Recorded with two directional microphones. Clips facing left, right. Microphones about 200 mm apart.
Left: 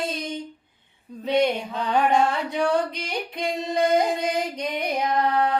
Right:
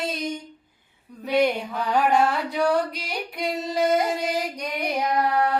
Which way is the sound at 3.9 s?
20° left (ahead or behind).